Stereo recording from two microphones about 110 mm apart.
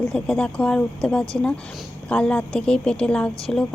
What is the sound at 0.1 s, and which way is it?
A woman's voice, 10° left (ahead or behind).